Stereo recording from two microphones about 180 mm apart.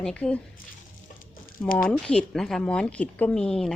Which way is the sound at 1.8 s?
5° left (ahead or behind).